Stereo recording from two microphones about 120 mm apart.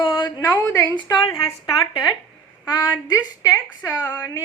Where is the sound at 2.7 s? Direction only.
35° left (ahead or behind).